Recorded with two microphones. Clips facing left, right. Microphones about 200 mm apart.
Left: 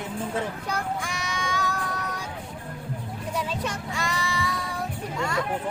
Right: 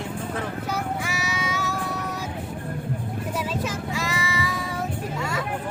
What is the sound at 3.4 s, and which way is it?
Child singing, 5° right (ahead or behind).